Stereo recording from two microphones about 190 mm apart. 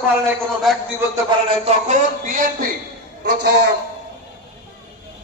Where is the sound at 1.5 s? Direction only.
35° right (ahead or behind).